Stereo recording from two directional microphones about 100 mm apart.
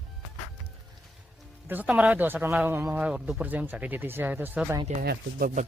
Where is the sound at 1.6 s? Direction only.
15° right (ahead or behind).